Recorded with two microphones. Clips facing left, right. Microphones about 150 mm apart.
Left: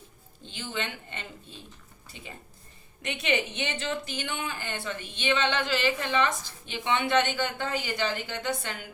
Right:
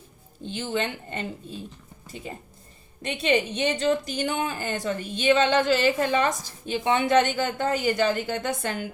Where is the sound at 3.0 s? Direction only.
30° right (ahead or behind).